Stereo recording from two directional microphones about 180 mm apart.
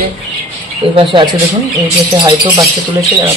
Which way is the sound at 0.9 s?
25° right (ahead or behind).